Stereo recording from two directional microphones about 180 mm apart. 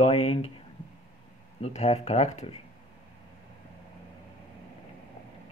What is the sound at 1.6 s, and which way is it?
Speech, 40° left (ahead or behind).